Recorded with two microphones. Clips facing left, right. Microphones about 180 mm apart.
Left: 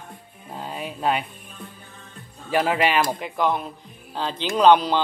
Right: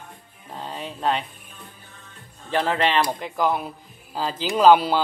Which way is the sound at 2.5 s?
10° left (ahead or behind).